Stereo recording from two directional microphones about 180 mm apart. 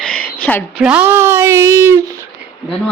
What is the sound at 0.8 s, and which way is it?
Speech, 10° right (ahead or behind).